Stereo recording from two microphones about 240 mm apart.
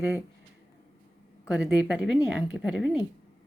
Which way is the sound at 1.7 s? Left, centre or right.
Centre.